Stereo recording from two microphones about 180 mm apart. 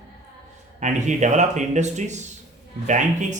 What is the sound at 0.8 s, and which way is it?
A man's voice, 40° right (ahead or behind).